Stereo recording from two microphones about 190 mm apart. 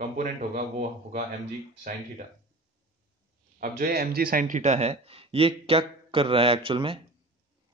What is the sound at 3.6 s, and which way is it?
Speech, 50° right (ahead or behind).